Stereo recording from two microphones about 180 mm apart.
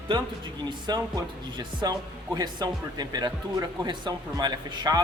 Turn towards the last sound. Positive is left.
turn(degrees=-20)  # may be behind; listen again after turning